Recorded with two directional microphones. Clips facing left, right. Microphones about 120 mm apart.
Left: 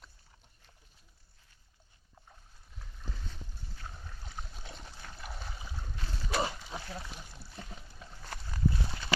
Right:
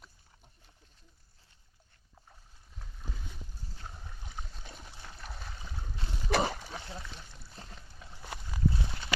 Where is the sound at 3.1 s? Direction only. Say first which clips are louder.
Even; 10° right (ahead or behind).